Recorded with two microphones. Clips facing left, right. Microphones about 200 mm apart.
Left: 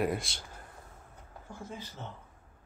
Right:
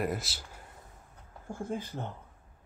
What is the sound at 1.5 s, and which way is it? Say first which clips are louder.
Speech: right 7 dB; 45° right (ahead or behind).